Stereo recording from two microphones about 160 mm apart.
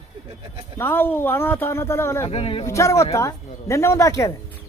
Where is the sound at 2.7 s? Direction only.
20° left (ahead or behind).